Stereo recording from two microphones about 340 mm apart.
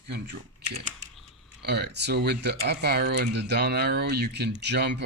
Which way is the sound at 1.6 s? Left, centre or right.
Right.